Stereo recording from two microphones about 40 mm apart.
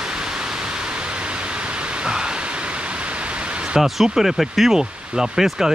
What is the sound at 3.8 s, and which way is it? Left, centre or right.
Speech, centre.